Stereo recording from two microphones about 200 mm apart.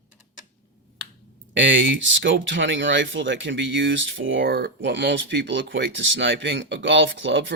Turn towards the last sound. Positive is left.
turn(degrees=-65)  # may be behind; listen again after turning